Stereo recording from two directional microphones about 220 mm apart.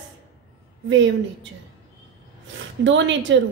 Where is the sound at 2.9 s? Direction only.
55° right (ahead or behind).